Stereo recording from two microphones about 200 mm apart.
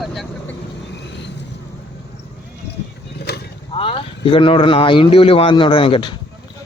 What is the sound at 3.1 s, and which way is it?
Vehicle, 55° left (ahead or behind).